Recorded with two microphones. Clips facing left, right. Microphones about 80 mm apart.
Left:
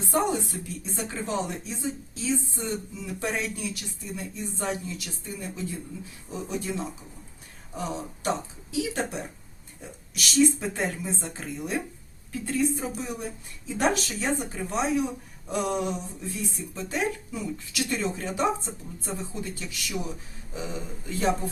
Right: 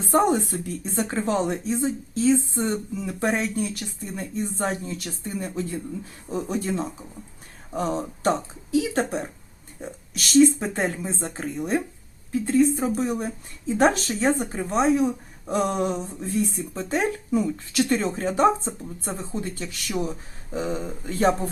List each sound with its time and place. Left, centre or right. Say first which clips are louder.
0.1 s a woman's voice: right 6 dB; right